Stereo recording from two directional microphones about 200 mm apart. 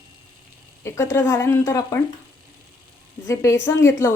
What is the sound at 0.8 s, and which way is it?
A woman's voice, 15° left (ahead or behind).